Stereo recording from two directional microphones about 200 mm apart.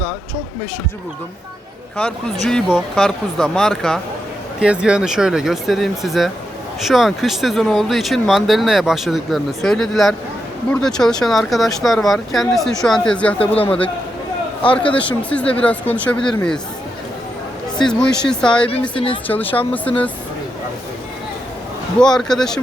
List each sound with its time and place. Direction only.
2.0 s speech: 5° left (ahead or behind)
15.2 s speech: 5° left (ahead or behind)
17.7 s speech: 5° left (ahead or behind)
18.7 s speech: 25° left (ahead or behind)
19.3 s speech: 10° left (ahead or behind)
21.9 s speech: 5° left (ahead or behind)